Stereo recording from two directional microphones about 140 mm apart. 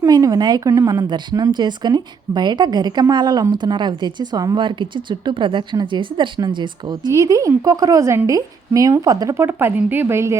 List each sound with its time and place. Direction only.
0.0 s a woman's voice: 25° right (ahead or behind)